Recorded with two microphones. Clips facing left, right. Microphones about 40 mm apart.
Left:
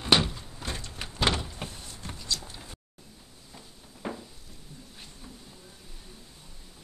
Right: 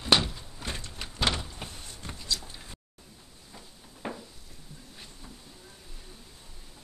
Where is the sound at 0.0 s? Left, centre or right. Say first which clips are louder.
Left 1 dB; centre.